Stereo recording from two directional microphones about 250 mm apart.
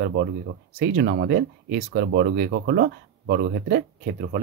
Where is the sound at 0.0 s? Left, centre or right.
Right.